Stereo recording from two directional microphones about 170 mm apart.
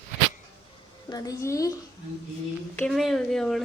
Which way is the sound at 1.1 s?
20° left (ahead or behind).